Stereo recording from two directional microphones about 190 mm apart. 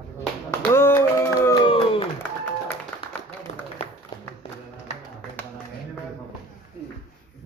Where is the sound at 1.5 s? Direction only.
30° left (ahead or behind).